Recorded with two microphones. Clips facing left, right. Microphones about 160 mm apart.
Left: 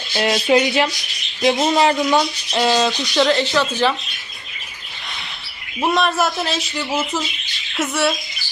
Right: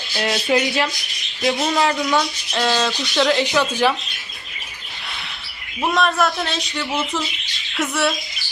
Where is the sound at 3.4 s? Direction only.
10° right (ahead or behind).